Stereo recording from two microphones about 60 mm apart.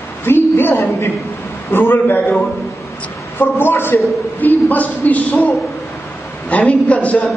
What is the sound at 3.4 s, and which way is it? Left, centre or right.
A man's voice, left.